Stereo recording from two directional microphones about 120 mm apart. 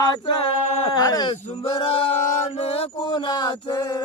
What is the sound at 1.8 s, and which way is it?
Chant, 50° left (ahead or behind).